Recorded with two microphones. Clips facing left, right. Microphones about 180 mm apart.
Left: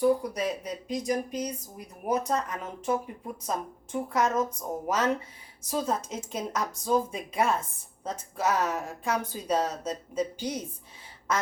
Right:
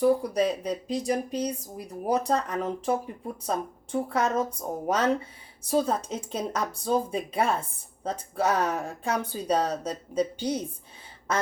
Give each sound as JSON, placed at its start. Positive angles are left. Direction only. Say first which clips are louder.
{"t": 0.0, "sound": "speech", "louder": "right 2 dB", "side_deg": -30}